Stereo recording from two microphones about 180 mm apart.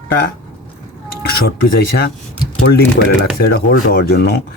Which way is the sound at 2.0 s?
60° left (ahead or behind).